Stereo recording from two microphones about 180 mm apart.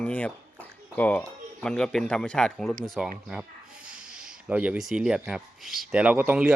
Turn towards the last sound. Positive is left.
turn(degrees=-10)  # may be behind; listen again after turning